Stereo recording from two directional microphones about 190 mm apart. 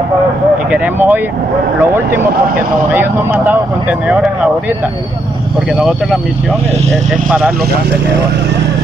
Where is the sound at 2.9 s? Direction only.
10° right (ahead or behind).